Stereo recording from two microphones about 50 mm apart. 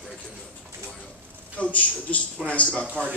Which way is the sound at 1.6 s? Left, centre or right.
Left.